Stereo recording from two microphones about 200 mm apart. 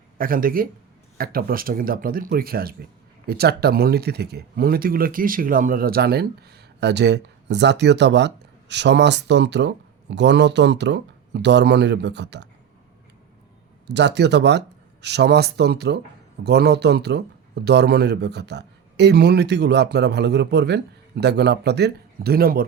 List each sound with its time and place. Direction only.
0.2 s speech: 45° right (ahead or behind)
13.8 s speech: 60° right (ahead or behind)